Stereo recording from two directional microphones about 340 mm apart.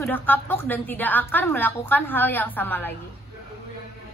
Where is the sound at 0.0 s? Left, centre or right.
Centre.